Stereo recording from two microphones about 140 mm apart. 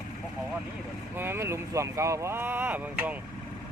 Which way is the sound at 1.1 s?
15° right (ahead or behind).